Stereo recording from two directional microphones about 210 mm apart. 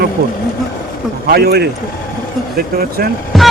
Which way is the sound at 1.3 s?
50° right (ahead or behind).